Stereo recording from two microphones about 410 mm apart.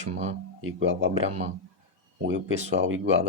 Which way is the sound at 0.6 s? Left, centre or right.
Right.